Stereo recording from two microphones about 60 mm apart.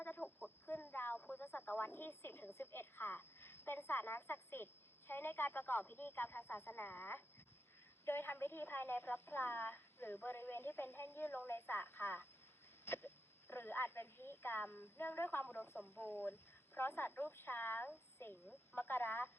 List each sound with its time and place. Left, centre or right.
0.0 s chicken: left
0.6 s a woman's voice: left
18.2 s a woman's voice: left
18.7 s a woman's voice: left